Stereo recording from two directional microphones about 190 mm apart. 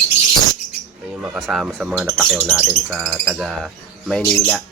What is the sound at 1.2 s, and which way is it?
Speech, 5° right (ahead or behind).